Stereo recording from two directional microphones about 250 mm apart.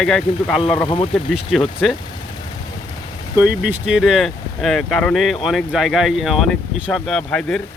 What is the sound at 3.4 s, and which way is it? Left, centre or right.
Speech, centre.